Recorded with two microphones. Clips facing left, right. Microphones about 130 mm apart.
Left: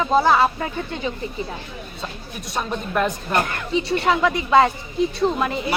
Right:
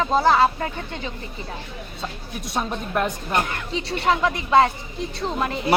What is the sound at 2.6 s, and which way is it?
Speech, 20° right (ahead or behind).